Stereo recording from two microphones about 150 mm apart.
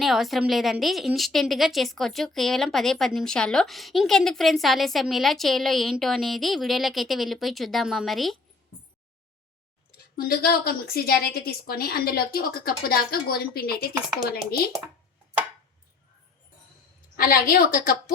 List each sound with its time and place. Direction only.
0.0 s a woman's voice: centre (ahead or behind)
10.2 s a woman's voice: 90° left
17.2 s a woman's voice: 70° left (ahead or behind)